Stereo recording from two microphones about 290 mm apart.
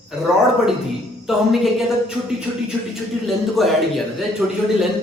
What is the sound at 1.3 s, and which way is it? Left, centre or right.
A man's voice, centre.